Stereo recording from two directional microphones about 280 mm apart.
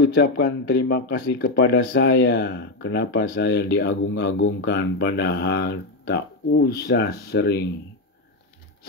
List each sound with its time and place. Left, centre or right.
0.0 s speech: left